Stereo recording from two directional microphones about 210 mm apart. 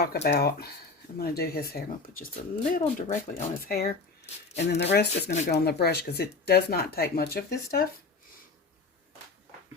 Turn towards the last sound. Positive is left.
turn(degrees=50)  # may be behind; listen again after turning